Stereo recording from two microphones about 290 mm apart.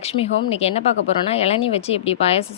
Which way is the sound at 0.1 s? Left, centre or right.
Centre.